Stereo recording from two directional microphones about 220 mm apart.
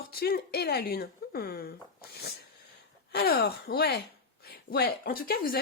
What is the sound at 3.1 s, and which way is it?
Speech, 45° left (ahead or behind).